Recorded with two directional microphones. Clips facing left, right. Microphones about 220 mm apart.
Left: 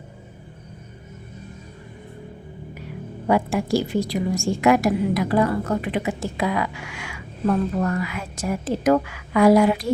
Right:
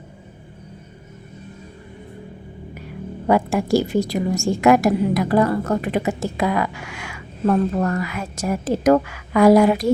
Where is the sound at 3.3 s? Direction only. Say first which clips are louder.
Right 3 dB; 45° right (ahead or behind).